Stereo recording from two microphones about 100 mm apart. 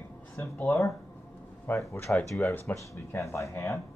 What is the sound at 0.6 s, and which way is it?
Speech, 30° left (ahead or behind).